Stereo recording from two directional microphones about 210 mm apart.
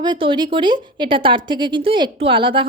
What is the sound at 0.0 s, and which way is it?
Speech, 20° right (ahead or behind).